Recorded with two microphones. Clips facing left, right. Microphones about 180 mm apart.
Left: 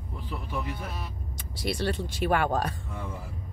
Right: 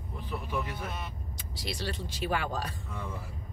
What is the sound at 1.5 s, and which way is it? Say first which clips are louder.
Speech: left 7 dB; 55° left (ahead or behind).